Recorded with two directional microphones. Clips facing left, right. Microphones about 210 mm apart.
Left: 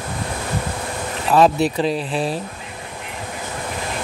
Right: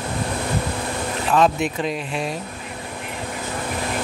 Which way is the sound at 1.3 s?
35° left (ahead or behind).